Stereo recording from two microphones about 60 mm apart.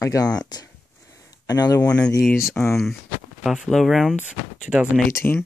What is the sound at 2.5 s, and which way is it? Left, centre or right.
Speech, left.